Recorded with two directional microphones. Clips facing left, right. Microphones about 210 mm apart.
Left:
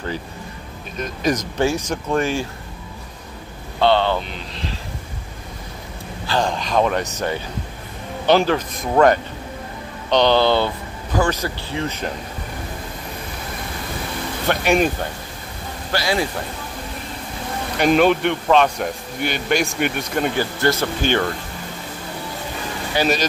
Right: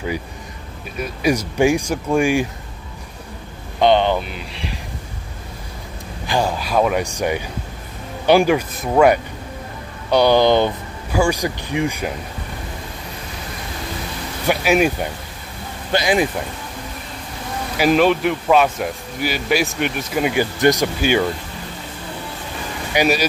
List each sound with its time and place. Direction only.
0.9 s speech: 10° right (ahead or behind)
3.8 s speech: 15° right (ahead or behind)
6.2 s speech: 10° right (ahead or behind)
14.5 s speech: 5° right (ahead or behind)
15.9 s speech: 20° right (ahead or behind)
17.7 s speech: centre (ahead or behind)
22.9 s speech: 10° right (ahead or behind)